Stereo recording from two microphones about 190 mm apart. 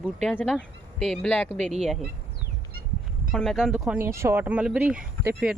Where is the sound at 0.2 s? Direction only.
Centre (ahead or behind).